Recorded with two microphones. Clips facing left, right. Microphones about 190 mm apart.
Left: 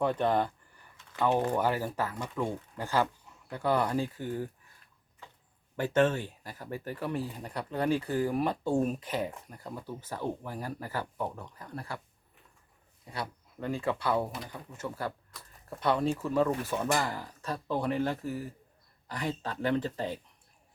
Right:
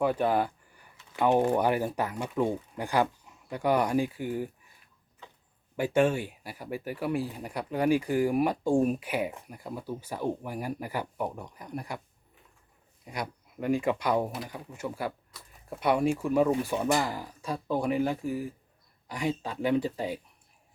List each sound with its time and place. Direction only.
0.0 s speech: 10° right (ahead or behind)
5.7 s speech: 10° right (ahead or behind)
13.1 s speech: 15° right (ahead or behind)